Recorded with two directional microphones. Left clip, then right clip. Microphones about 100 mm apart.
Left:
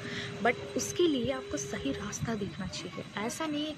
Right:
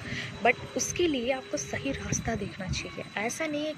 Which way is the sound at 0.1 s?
35° left (ahead or behind).